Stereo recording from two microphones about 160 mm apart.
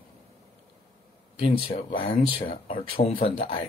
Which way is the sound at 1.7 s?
35° left (ahead or behind).